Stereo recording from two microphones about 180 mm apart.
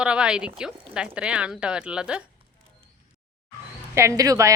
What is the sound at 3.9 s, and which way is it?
Speech, 15° right (ahead or behind).